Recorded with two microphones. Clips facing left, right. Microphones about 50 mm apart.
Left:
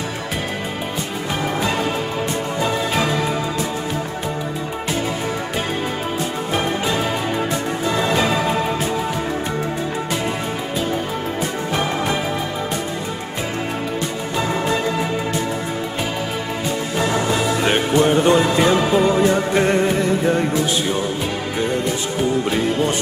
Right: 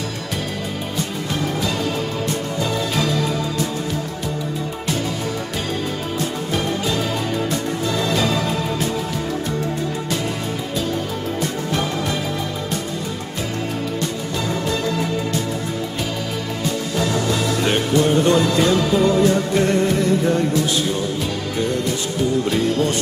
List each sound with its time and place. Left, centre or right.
2.6 s music: left
7.8 s music: left
14.5 s music: left
16.6 s music: left
22.4 s music: centre